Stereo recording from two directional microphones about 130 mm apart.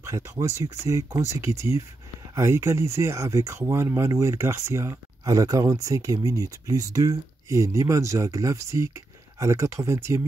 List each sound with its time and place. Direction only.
0.0 s speech: 25° right (ahead or behind)